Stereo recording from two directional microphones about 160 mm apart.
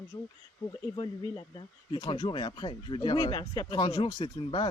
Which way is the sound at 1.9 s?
30° left (ahead or behind).